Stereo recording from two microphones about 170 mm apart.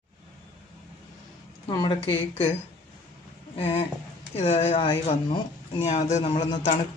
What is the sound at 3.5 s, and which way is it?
Speech, 35° left (ahead or behind).